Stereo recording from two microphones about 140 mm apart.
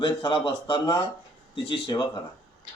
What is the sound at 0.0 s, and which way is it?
Speech, 40° left (ahead or behind).